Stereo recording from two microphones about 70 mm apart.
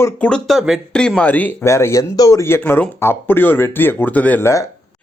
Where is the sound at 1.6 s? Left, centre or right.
Left.